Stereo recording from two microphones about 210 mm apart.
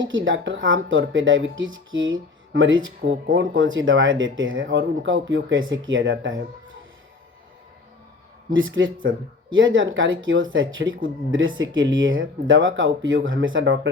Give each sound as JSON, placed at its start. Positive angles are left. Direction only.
{"t": 0.0, "sound": "speech", "side_deg": -65}
{"t": 8.5, "sound": "speech", "side_deg": -65}